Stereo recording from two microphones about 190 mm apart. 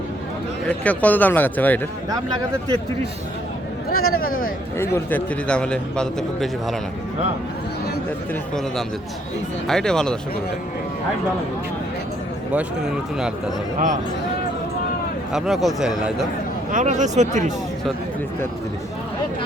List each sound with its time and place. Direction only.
0.7 s speech: 10° left (ahead or behind)
4.1 s speech: 50° left (ahead or behind)
4.8 s a man's voice: 10° left (ahead or behind)
9.6 s a man's voice: 5° left (ahead or behind)
12.5 s a man's voice: 5° right (ahead or behind)
13.7 s speech: 40° right (ahead or behind)
15.3 s a man's voice: centre (ahead or behind)
16.7 s speech: 40° right (ahead or behind)